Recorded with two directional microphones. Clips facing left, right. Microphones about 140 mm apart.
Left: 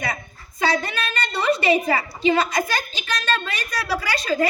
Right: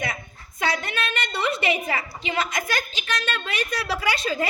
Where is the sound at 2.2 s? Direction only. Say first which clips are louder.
Left 8 dB; 30° left (ahead or behind).